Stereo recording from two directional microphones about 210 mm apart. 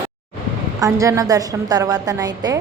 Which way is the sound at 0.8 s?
15° right (ahead or behind).